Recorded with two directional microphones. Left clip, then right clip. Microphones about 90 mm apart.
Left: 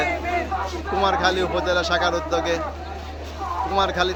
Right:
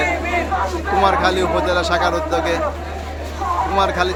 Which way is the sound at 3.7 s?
35° left (ahead or behind).